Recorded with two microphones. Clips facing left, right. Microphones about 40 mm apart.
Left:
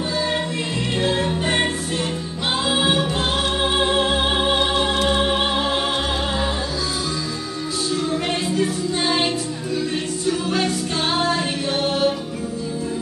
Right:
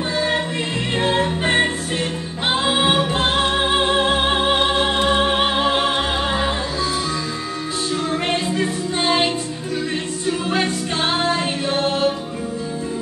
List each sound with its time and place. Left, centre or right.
0.9 s music: right
8.1 s music: right
10.5 s music: right